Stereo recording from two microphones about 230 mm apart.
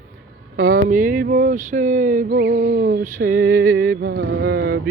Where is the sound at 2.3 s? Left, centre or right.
Right.